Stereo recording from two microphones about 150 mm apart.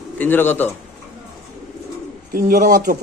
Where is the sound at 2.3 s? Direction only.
85° right; by 2.9 s 70° right (ahead or behind).